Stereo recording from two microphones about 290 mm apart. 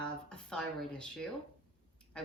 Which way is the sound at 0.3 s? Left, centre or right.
Centre.